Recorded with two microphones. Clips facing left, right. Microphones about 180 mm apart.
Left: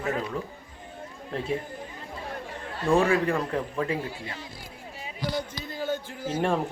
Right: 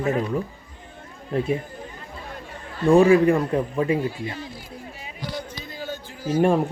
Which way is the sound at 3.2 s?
15° right (ahead or behind).